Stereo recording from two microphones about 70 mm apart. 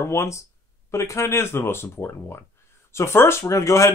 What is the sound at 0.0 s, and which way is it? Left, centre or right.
Speech, left.